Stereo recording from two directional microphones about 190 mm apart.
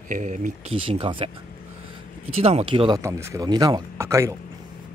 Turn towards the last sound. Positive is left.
turn(degrees=-15)  # may be behind; listen again after turning